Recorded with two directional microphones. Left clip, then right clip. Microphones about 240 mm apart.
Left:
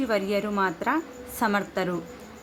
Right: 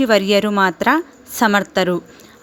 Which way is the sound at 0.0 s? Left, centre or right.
Right.